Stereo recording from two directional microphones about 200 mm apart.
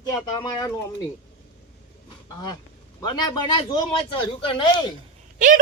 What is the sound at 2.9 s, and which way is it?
A man's voice, 20° left (ahead or behind).